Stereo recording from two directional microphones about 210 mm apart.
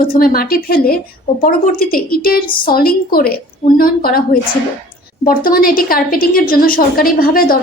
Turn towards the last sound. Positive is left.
turn(degrees=45)  # may be behind; listen again after turning